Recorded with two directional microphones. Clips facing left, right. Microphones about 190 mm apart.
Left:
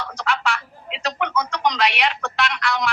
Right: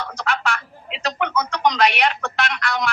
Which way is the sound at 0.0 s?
45° right (ahead or behind).